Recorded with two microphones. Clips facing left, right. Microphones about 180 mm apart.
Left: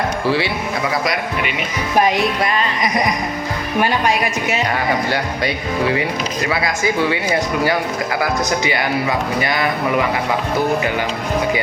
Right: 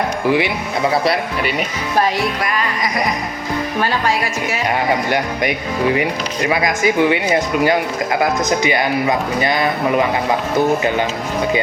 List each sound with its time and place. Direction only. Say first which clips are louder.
0.3 s speech: right 3 dB; 15° right (ahead or behind)
1.0 s speech: right 3 dB; 35° right (ahead or behind)
2.0 s a woman's voice: left 2 dB; 20° left (ahead or behind)
3.8 s a woman's voice: left 3 dB; 15° left (ahead or behind)
5.0 s speech: right 2 dB; 20° right (ahead or behind)
6.7 s speech: right 5 dB; 20° right (ahead or behind)